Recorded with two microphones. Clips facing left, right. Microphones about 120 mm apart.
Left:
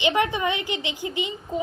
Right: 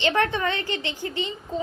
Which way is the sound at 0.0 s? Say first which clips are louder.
Even; 15° left (ahead or behind).